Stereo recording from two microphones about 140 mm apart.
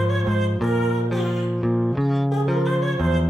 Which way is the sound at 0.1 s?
Centre (ahead or behind).